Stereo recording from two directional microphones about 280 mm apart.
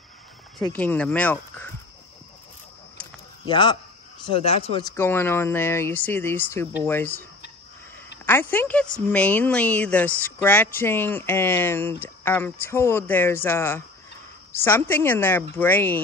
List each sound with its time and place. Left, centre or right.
0.6 s speech: centre
3.4 s speech: centre
8.3 s speech: centre